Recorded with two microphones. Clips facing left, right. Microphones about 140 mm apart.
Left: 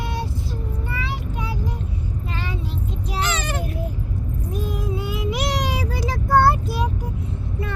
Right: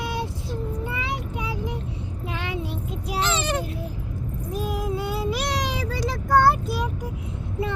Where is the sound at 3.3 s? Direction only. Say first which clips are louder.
Right 2 dB; 30° right (ahead or behind).